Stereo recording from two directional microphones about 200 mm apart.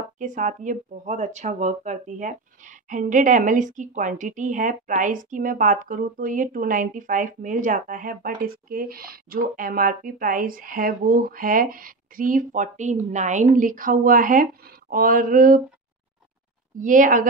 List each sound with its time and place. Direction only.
0.2 s speech: 40° right (ahead or behind)
16.7 s speech: 40° right (ahead or behind)